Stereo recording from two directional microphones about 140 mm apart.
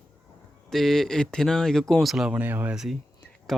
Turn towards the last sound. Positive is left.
turn(degrees=0)  # may be behind; listen again after turning